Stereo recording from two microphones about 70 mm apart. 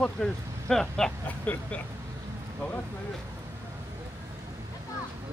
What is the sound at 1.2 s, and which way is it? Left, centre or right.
Speech, left.